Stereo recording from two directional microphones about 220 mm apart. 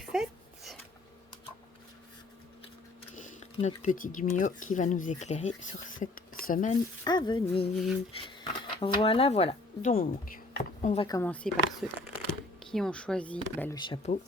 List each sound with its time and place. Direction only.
0.0 s a sound: centre (ahead or behind)
3.2 s speech: 35° left (ahead or behind)
7.0 s speech: 20° left (ahead or behind)
8.8 s speech: 25° left (ahead or behind)
9.9 s speech: 40° left (ahead or behind)
10.9 s speech: 20° left (ahead or behind)
11.2 s speech: 5° left (ahead or behind)
13.7 s speech: 20° left (ahead or behind)